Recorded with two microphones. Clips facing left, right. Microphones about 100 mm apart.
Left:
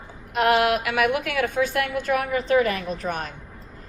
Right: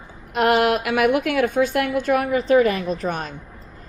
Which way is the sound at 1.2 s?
25° right (ahead or behind).